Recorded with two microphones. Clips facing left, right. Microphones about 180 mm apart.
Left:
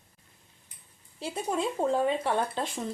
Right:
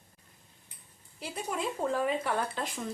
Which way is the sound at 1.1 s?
25° left (ahead or behind).